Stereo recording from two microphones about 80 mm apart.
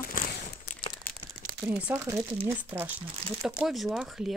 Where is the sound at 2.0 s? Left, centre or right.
Right.